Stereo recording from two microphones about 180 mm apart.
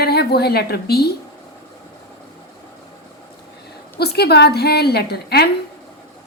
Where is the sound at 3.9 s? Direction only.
60° left (ahead or behind).